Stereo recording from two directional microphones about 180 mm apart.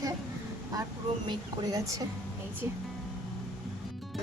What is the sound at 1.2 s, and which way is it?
Speech, 20° right (ahead or behind).